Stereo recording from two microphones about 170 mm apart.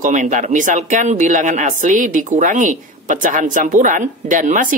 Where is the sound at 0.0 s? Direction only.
45° right (ahead or behind).